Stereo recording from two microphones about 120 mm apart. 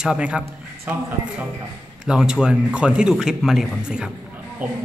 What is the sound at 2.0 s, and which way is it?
A man's voice, 5° right (ahead or behind).